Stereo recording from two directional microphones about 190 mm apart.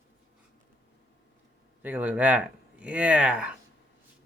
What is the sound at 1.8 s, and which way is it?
Speech, 10° right (ahead or behind).